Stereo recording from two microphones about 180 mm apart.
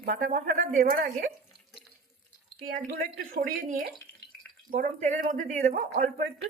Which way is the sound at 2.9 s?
65° right (ahead or behind).